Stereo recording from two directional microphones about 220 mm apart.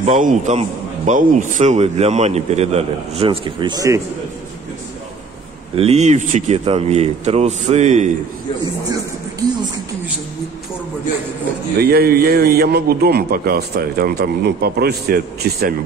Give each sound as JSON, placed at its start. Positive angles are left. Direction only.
{"t": 0.0, "sound": "a man's voice", "side_deg": -35}
{"t": 5.8, "sound": "speech", "side_deg": -30}
{"t": 11.8, "sound": "a man's voice", "side_deg": -45}